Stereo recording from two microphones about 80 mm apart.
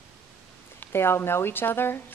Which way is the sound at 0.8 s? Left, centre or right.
Left.